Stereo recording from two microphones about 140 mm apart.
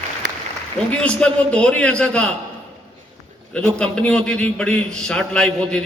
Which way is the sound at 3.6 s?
5° left (ahead or behind).